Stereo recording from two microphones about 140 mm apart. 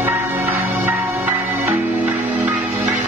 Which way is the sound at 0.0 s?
15° right (ahead or behind).